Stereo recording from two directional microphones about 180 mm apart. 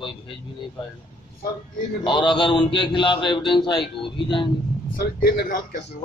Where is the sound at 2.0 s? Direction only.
25° left (ahead or behind).